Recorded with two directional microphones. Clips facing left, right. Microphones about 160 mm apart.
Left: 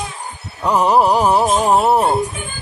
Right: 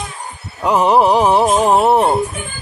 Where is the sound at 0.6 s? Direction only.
Centre (ahead or behind).